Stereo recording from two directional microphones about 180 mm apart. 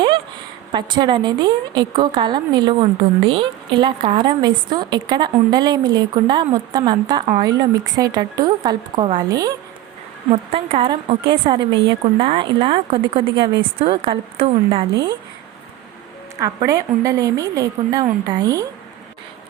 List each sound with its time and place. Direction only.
0.7 s a woman's voice: 25° right (ahead or behind)
10.5 s a woman's voice: 30° right (ahead or behind)
16.4 s a woman's voice: 20° right (ahead or behind)